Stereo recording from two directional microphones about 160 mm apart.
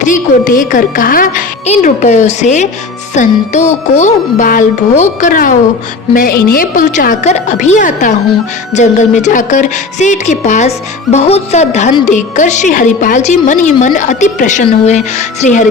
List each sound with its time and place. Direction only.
0.0 s a woman's voice: 55° left (ahead or behind)